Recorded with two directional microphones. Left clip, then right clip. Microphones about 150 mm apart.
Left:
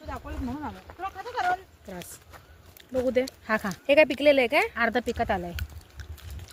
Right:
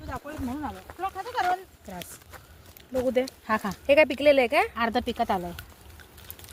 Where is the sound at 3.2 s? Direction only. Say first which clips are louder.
Even; 40° left (ahead or behind).